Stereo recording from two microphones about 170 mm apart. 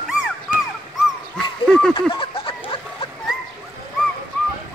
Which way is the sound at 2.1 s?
30° left (ahead or behind).